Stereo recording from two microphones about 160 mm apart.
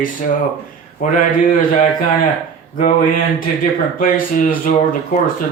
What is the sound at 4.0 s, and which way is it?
Speech, 60° left (ahead or behind).